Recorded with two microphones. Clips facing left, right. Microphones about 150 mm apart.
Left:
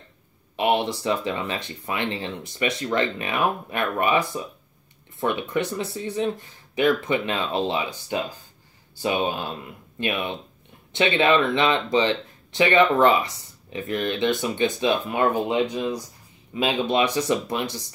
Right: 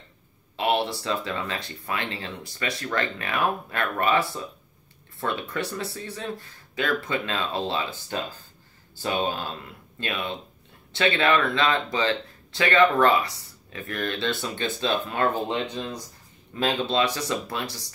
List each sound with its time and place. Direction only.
0.6 s speech: 20° left (ahead or behind)